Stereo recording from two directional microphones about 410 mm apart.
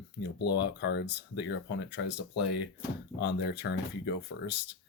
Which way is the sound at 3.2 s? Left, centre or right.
Left.